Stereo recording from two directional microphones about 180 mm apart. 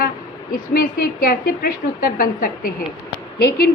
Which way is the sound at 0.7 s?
50° left (ahead or behind).